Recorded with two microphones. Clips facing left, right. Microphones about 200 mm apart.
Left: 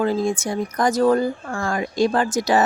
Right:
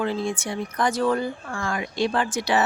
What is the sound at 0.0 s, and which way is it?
Speech, 40° left (ahead or behind).